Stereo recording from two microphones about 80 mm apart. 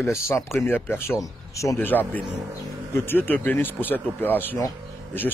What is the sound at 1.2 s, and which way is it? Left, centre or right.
Speech, left.